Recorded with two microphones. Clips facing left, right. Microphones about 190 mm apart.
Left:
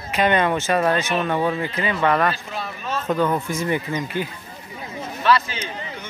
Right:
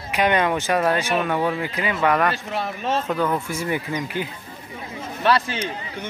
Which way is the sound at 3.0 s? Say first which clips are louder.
Left 6 dB; 5° left (ahead or behind).